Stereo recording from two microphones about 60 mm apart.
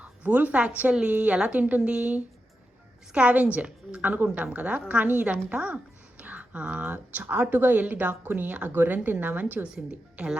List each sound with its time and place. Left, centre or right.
0.0 s a woman's voice: right